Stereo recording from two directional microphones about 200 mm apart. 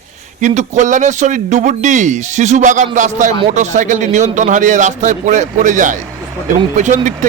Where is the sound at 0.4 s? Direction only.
40° right (ahead or behind).